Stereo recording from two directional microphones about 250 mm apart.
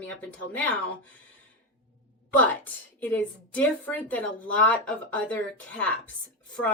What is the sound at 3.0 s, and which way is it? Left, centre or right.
Speech, centre.